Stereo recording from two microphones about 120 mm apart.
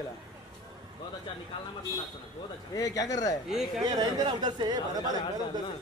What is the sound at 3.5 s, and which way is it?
Speech, 5° right (ahead or behind).